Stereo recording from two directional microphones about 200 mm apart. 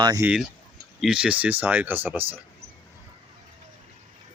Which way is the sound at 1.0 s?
5° right (ahead or behind).